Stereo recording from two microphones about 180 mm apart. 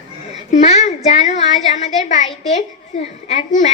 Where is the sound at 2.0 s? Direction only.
40° left (ahead or behind).